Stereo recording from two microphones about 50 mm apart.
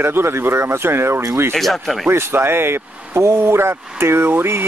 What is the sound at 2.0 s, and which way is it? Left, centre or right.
Speech, right.